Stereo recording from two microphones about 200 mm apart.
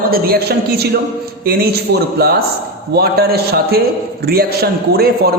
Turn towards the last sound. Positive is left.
turn(degrees=-50)  # may be behind; listen again after turning